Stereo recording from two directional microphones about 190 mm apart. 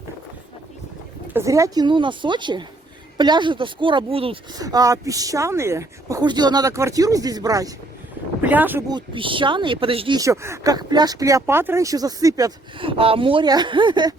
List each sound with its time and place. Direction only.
1.3 s speech: 15° right (ahead or behind)
8.9 s speech: 25° right (ahead or behind)
10.2 s speech: 15° right (ahead or behind)